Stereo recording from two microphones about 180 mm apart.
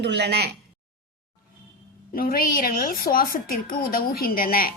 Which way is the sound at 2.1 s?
55° left (ahead or behind).